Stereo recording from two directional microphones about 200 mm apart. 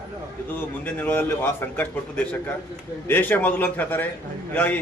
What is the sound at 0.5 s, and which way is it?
A man's voice, 10° left (ahead or behind).